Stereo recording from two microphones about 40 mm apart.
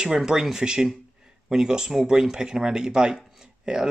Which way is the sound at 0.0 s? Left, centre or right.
Centre.